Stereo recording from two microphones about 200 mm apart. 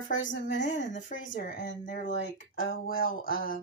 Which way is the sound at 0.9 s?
40° left (ahead or behind).